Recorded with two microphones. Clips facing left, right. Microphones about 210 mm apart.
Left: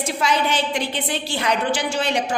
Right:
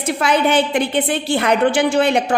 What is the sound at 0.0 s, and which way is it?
A woman's voice, 60° right (ahead or behind).